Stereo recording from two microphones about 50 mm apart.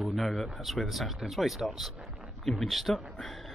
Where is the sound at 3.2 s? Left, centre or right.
Centre.